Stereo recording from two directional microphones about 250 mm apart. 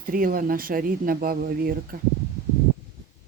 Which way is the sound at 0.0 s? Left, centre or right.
Right.